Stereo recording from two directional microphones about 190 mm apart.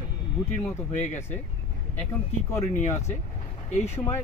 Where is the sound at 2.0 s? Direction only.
15° left (ahead or behind).